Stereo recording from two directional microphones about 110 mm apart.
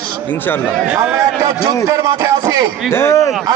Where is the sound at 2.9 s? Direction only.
25° left (ahead or behind).